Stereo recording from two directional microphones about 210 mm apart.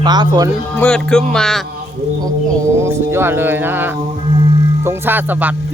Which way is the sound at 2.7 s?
10° right (ahead or behind).